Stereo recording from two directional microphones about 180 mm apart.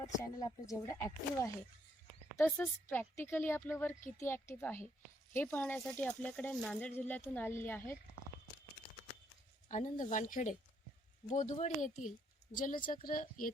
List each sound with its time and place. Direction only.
0.2 s speech: 20° left (ahead or behind)
9.6 s a woman's voice: 45° left (ahead or behind)